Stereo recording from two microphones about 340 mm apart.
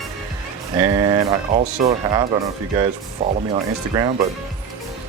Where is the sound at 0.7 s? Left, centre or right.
Centre.